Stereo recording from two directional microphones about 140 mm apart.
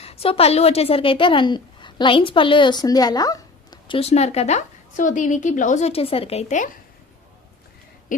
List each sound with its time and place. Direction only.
0.0 s speech: 45° left (ahead or behind)